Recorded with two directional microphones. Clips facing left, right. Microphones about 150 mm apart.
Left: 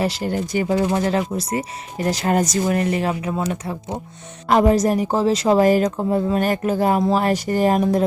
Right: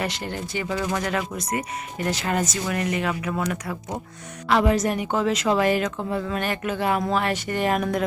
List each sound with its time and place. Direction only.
0.3 s speech: 40° left (ahead or behind)
4.4 s speech: 40° left (ahead or behind)